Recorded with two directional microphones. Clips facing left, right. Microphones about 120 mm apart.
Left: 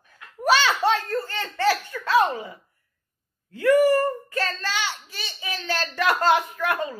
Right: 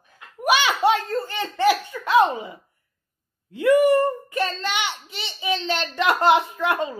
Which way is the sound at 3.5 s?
20° right (ahead or behind).